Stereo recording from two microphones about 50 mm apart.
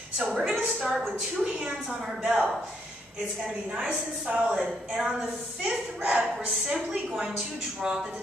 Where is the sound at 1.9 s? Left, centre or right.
Centre.